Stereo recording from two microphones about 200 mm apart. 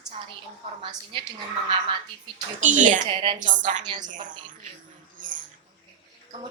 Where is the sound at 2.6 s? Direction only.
40° right (ahead or behind).